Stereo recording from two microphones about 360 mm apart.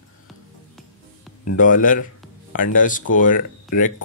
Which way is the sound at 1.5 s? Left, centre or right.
Left.